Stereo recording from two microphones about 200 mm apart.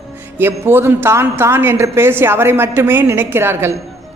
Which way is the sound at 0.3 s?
10° right (ahead or behind).